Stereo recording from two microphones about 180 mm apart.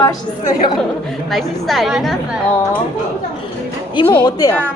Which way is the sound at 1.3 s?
Centre (ahead or behind).